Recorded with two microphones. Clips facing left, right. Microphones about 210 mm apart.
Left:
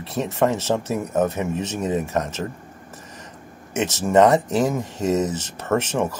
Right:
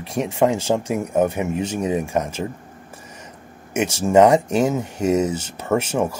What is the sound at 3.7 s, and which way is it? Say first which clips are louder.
Speech: right 2 dB; 10° right (ahead or behind).